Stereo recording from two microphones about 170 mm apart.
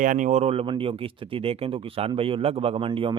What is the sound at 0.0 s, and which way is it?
Speech, 50° right (ahead or behind).